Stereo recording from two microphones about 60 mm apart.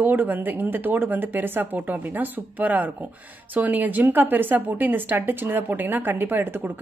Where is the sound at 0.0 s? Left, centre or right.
Right.